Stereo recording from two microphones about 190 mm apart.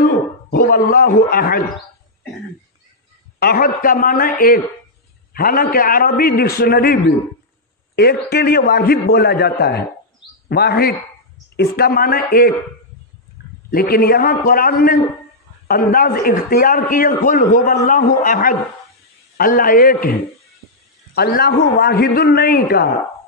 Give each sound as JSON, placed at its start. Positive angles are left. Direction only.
{"t": 0.0, "sound": "a sound", "side_deg": 50}
{"t": 3.3, "sound": "a man's voice", "side_deg": 50}
{"t": 13.7, "sound": "a man's voice", "side_deg": 50}